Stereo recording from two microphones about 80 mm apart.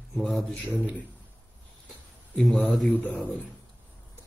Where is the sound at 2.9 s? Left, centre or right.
Left.